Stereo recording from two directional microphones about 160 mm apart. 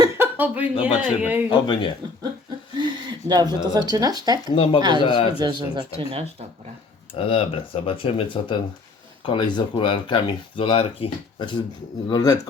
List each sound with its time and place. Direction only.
0.0 s a sound: 10° right (ahead or behind)
0.9 s a man's voice: 10° right (ahead or behind)
1.5 s speech: 30° left (ahead or behind)
2.7 s speech: 25° right (ahead or behind)
4.5 s speech: 35° left (ahead or behind)
4.8 s speech: 30° right (ahead or behind)
5.0 s speech: 35° left (ahead or behind)
5.4 s speech: 30° right (ahead or behind)
7.1 s speech: 35° left (ahead or behind)